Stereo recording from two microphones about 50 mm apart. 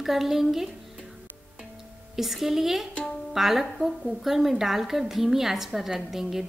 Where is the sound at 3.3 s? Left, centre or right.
Centre.